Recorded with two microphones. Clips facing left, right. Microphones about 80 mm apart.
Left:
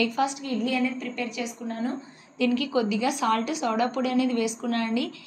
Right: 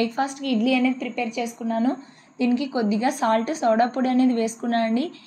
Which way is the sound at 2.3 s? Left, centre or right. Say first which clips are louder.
Right 2 dB; right.